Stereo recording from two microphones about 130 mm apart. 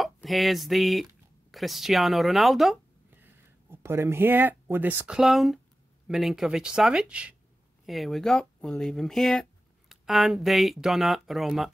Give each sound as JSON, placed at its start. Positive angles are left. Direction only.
{"t": 0.0, "sound": "speech", "side_deg": 0}
{"t": 3.1, "sound": "speech", "side_deg": -15}